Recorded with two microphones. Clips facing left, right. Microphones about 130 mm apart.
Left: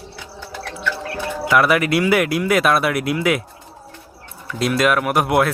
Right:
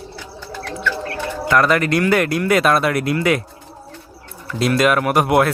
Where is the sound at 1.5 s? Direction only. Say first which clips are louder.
Even; 5° left (ahead or behind).